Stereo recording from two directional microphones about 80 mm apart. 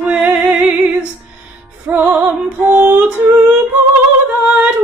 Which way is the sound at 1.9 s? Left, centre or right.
Right.